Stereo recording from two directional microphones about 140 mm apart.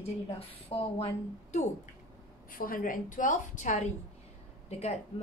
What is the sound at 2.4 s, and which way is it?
A woman's voice, 85° left.